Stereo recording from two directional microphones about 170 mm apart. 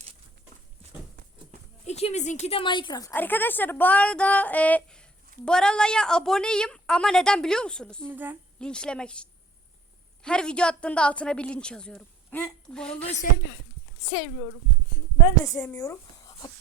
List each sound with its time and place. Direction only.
1.9 s a woman's voice: 40° left (ahead or behind); by 8.0 s 5° left (ahead or behind)
8.0 s a woman's voice: 10° right (ahead or behind)
8.6 s a woman's voice: 5° left (ahead or behind)
15.4 s speech: 15° left (ahead or behind)